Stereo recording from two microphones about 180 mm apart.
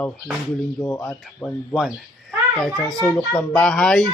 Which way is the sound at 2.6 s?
Centre (ahead or behind).